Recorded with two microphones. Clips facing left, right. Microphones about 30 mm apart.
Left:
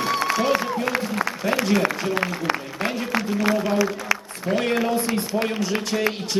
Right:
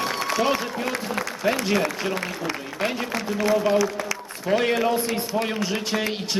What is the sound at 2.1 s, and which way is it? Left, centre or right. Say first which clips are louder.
Speech: left 4 dB; left.